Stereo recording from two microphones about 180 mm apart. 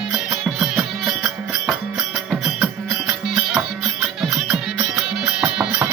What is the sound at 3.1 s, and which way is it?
Music, 5° right (ahead or behind).